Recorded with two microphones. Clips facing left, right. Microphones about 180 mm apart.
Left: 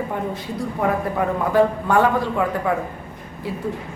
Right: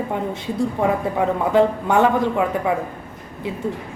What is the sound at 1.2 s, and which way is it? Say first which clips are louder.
A man's voice: right 1 dB; 20° right (ahead or behind).